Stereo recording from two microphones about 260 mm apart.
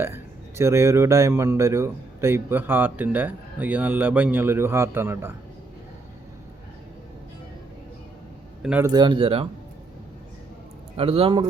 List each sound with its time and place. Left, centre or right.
0.0 s speech: centre
8.6 s speech: centre
10.9 s speech: right